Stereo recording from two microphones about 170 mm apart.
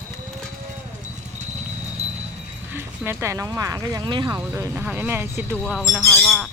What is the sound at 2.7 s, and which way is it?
Speech, 15° right (ahead or behind).